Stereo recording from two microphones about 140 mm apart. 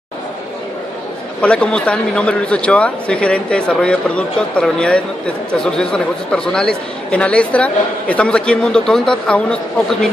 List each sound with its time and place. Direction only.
1.4 s speech: 10° left (ahead or behind)